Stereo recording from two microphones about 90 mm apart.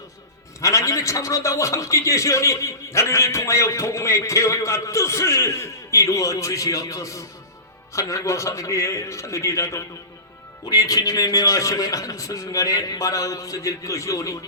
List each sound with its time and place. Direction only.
0.6 s a man's voice: 35° left (ahead or behind)